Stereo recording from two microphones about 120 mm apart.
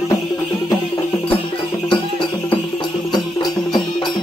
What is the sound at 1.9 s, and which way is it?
Music, 40° left (ahead or behind).